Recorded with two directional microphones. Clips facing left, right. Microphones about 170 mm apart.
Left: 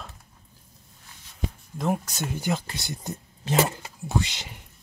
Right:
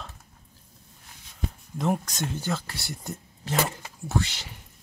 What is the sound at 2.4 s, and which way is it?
Speech, 15° left (ahead or behind).